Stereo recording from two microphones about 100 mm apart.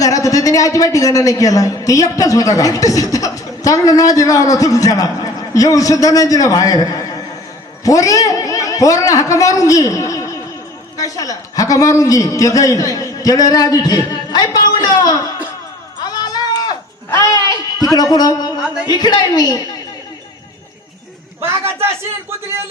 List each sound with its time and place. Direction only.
0.0 s a man's voice: 35° left (ahead or behind)
16.0 s sheep: 45° left (ahead or behind)
17.1 s a sound: 35° left (ahead or behind)
17.9 s a man's voice: 40° left (ahead or behind)
18.6 s speech: 10° right (ahead or behind)
18.9 s a woman's voice: 45° left (ahead or behind)
21.4 s a man's voice: 25° right (ahead or behind)